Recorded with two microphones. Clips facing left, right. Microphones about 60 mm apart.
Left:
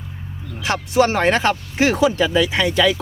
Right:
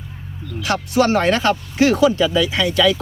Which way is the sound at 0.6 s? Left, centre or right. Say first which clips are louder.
Even; left.